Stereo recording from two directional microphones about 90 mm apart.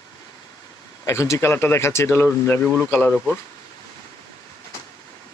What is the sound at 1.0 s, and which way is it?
Speech, 35° left (ahead or behind).